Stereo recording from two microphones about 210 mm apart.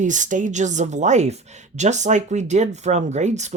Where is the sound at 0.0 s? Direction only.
35° right (ahead or behind).